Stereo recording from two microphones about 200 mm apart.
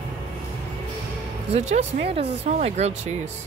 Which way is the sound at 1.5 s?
35° right (ahead or behind).